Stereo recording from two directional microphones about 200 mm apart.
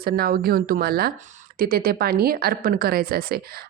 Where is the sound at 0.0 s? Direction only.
50° right (ahead or behind).